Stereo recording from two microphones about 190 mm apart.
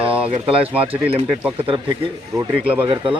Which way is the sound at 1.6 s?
30° right (ahead or behind).